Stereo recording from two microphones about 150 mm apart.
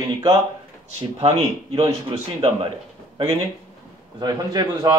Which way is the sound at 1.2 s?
40° right (ahead or behind).